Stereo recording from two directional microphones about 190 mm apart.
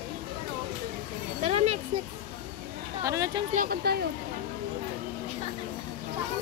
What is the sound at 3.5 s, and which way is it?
Speech, 50° right (ahead or behind).